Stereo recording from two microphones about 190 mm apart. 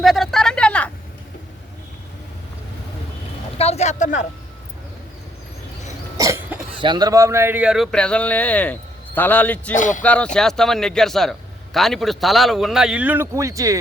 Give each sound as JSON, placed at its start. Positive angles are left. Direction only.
{"t": 0.0, "sound": "a sound", "side_deg": 0}
{"t": 3.6, "sound": "speech", "side_deg": 35}
{"t": 6.1, "sound": "cough", "side_deg": -15}
{"t": 6.7, "sound": "a man's voice", "side_deg": -25}
{"t": 9.7, "sound": "speech", "side_deg": 40}
{"t": 10.0, "sound": "a man's voice", "side_deg": 5}